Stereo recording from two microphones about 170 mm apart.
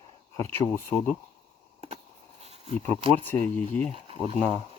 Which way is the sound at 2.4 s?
35° right (ahead or behind).